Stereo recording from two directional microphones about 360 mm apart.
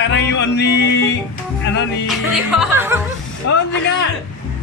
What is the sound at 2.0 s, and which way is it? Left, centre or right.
Music, centre.